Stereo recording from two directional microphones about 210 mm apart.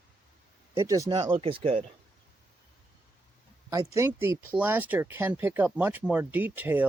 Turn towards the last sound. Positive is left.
turn(degrees=-10)  # may be behind; listen again after turning